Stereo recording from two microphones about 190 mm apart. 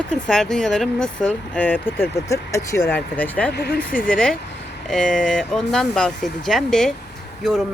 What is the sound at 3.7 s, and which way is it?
Speech, 5° left (ahead or behind).